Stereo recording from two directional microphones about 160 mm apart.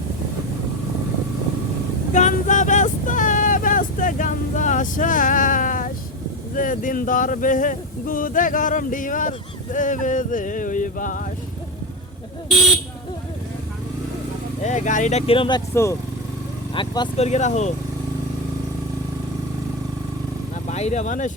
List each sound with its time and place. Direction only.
2.1 s vehicle: 50° left (ahead or behind)
6.6 s speech: 55° left (ahead or behind)
9.7 s a sound: 55° left (ahead or behind)
14.7 s a sound: 50° left (ahead or behind)
15.3 s speech: 30° left (ahead or behind)
15.7 s speech: 15° left (ahead or behind)
16.7 s speech: 30° left (ahead or behind)
17.2 s a sound: 45° left (ahead or behind)
20.7 s speech: 45° left (ahead or behind)